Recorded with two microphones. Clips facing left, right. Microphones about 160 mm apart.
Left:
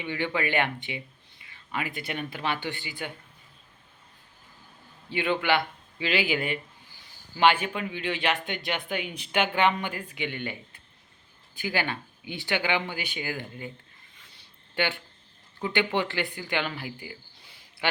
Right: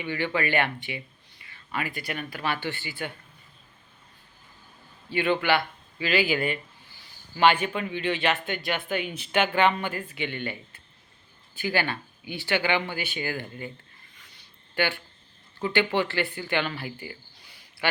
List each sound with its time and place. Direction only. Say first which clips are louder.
0.0 s speech: right 1 dB; 15° left (ahead or behind)
5.0 s a man's voice: right 2 dB; 15° left (ahead or behind)
14.8 s speech: right 2 dB; 20° left (ahead or behind)